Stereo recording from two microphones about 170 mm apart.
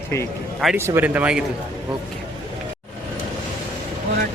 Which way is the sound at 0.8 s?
15° right (ahead or behind).